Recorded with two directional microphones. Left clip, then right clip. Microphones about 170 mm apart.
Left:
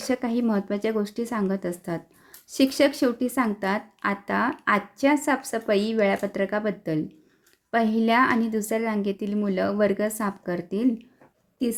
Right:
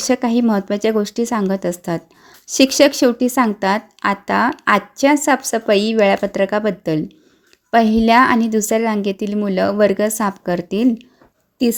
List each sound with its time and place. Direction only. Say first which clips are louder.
0.0 s speech: right 9 dB; 40° right (ahead or behind)